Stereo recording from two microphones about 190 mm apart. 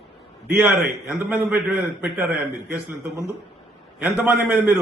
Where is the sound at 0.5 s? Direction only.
10° right (ahead or behind).